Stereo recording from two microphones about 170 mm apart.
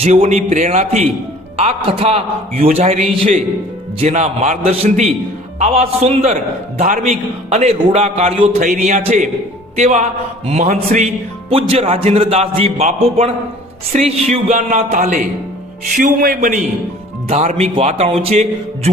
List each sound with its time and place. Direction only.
0.0 s a man's voice: 40° right (ahead or behind)
4.0 s a man's voice: 40° right (ahead or behind)
11.7 s a man's voice: 35° right (ahead or behind); by 16.6 s 55° right (ahead or behind)
17.2 s a man's voice: 40° right (ahead or behind)